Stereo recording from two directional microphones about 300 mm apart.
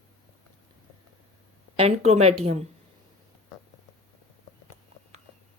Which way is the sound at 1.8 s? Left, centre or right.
Right.